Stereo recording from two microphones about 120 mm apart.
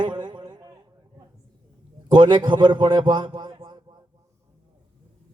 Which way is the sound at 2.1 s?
40° right (ahead or behind).